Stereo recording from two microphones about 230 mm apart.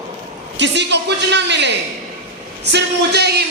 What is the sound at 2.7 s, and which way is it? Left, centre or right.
Speech, right.